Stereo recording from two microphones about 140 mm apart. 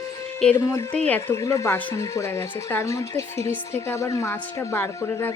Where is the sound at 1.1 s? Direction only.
20° left (ahead or behind).